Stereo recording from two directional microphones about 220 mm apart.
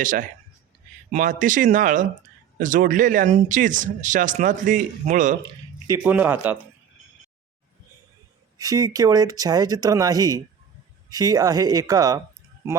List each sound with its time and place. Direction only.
0.0 s speech: 35° right (ahead or behind)
5.9 s speech: 5° right (ahead or behind)
8.5 s speech: 15° right (ahead or behind)